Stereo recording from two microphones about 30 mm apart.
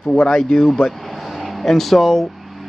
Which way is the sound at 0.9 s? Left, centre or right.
Centre.